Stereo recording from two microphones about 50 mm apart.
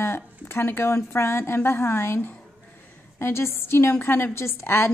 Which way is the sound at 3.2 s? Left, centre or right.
Left.